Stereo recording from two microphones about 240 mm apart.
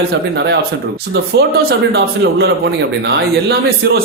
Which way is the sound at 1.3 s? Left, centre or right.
Right.